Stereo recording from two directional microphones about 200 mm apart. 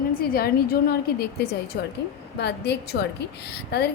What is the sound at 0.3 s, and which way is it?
A woman's voice, 50° left (ahead or behind).